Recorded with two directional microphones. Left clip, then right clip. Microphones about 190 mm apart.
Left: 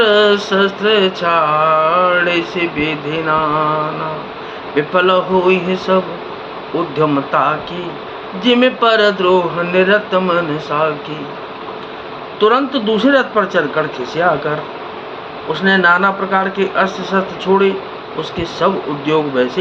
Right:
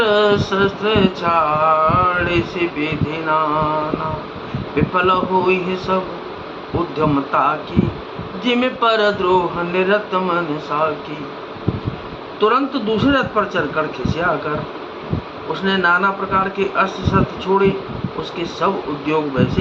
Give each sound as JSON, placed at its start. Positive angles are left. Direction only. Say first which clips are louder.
{"t": 0.0, "sound": "mantra", "louder": "left 4 dB", "side_deg": 10}
{"t": 4.7, "sound": "mantra", "louder": "left 4 dB", "side_deg": 10}
{"t": 7.0, "sound": "mantra", "louder": "left 2 dB", "side_deg": 10}
{"t": 12.4, "sound": "mantra", "louder": "left 3 dB", "side_deg": 15}
{"t": 15.6, "sound": "mantra", "louder": "left 4 dB", "side_deg": 15}
{"t": 18.6, "sound": "mantra", "louder": "left 4 dB", "side_deg": 15}